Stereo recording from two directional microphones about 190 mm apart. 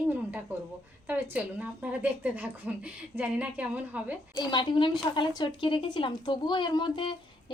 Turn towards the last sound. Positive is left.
turn(degrees=25)  # may be behind; listen again after turning